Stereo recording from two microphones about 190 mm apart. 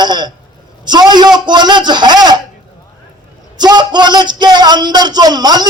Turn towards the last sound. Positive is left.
turn(degrees=-20)  # may be behind; listen again after turning